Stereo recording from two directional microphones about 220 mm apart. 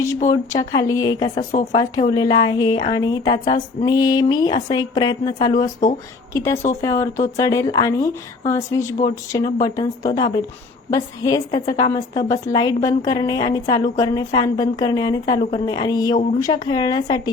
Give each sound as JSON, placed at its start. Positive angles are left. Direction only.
{"t": 0.3, "sound": "a woman's voice", "side_deg": 15}